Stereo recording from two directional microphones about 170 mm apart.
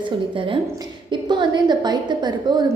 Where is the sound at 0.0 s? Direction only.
30° right (ahead or behind).